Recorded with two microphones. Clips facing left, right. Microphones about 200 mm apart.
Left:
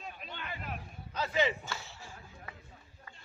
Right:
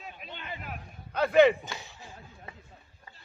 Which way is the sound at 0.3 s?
20° right (ahead or behind).